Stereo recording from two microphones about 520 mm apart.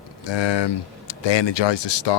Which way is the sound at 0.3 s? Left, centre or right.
Left.